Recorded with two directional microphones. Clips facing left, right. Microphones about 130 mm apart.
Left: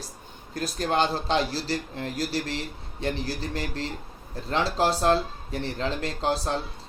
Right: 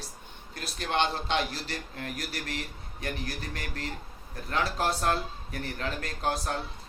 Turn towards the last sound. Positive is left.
turn(degrees=30)  # may be behind; listen again after turning